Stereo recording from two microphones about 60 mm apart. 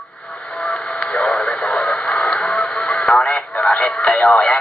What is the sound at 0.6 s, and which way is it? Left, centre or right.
Radio, centre.